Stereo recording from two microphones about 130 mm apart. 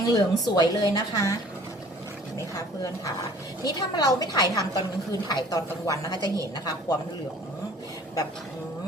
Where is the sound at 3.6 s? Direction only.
30° left (ahead or behind).